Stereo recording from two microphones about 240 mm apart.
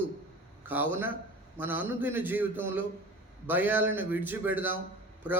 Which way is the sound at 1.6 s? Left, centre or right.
Centre.